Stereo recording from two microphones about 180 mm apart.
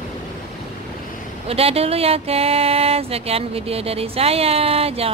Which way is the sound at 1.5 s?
35° right (ahead or behind).